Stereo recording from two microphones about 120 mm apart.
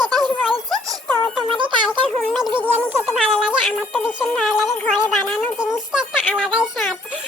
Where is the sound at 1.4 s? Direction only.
45° right (ahead or behind).